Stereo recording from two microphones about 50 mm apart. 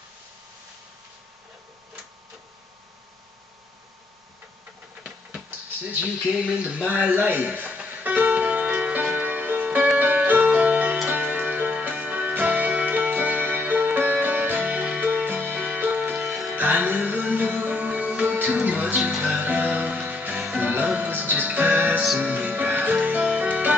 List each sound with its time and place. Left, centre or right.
6.3 s speech: right
7.2 s music: right
9.7 s music: right
9.9 s music: right
15.5 s music: centre
16.5 s music: right